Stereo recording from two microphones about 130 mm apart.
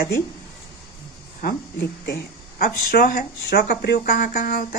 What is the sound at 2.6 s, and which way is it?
Speech, 90° left.